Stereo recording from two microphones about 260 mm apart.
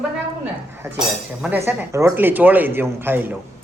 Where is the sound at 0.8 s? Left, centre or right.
Centre.